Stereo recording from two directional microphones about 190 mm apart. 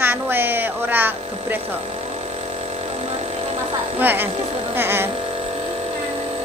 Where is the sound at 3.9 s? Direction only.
10° right (ahead or behind).